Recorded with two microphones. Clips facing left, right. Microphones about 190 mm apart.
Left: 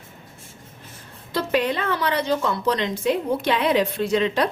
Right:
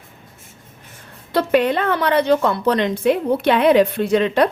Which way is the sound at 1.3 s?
60° right (ahead or behind).